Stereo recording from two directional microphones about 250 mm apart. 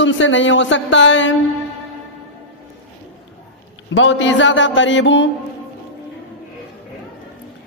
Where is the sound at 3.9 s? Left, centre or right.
Left.